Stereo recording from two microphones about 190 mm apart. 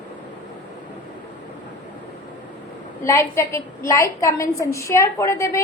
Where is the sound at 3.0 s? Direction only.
15° left (ahead or behind).